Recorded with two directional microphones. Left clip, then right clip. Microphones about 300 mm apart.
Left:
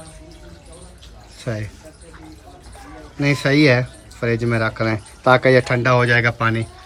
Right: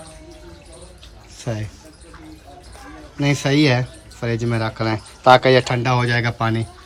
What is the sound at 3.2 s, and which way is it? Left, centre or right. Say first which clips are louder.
Speech: left 2 dB; centre.